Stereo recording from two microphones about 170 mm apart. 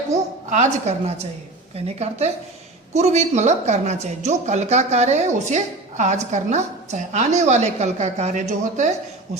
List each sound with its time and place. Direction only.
0.5 s a woman's voice: 40° right (ahead or behind)